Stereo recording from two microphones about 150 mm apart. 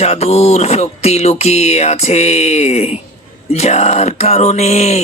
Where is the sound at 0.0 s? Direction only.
45° left (ahead or behind).